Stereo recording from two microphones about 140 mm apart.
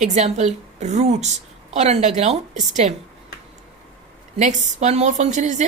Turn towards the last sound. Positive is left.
turn(degrees=-60)  # may be behind; listen again after turning